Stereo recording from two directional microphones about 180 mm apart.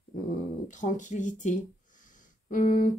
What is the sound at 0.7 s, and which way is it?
Speech, 45° left (ahead or behind).